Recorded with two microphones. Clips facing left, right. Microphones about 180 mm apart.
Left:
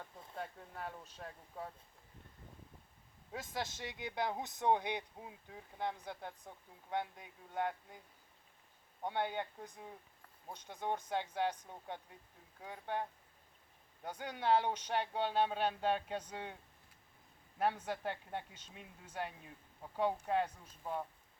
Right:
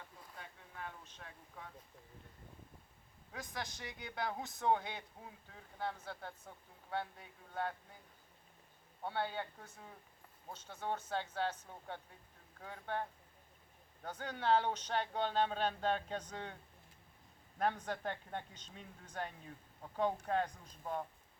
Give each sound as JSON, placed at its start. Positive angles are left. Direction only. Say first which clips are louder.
{"t": 0.3, "sound": "speech", "louder": "left 7 dB", "side_deg": 40}
{"t": 3.3, "sound": "speech", "louder": "left 4 dB", "side_deg": 25}
{"t": 9.0, "sound": "speech", "louder": "left 2 dB", "side_deg": 15}
{"t": 17.6, "sound": "speech", "louder": "left 1 dB", "side_deg": 10}